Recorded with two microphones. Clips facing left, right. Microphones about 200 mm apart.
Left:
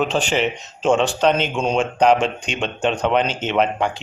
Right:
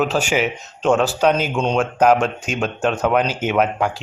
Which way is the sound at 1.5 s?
10° left (ahead or behind).